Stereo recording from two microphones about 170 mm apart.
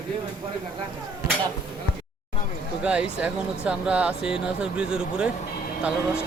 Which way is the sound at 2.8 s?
5° right (ahead or behind).